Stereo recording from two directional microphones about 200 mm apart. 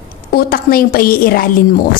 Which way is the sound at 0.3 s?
50° left (ahead or behind).